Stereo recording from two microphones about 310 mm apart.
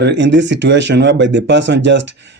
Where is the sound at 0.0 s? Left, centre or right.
Right.